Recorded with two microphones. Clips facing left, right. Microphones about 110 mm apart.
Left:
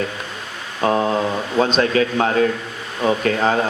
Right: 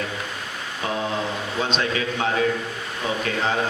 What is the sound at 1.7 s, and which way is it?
A man's voice, 50° left (ahead or behind).